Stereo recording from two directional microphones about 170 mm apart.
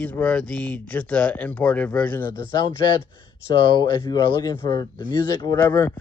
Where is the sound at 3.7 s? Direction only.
25° left (ahead or behind).